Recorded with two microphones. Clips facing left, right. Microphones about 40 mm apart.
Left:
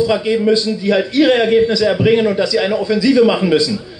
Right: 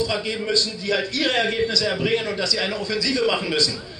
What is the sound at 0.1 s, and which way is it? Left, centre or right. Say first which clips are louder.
A man's voice: left 10 dB; left.